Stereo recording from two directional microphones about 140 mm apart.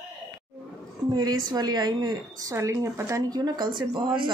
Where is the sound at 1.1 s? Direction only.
30° right (ahead or behind).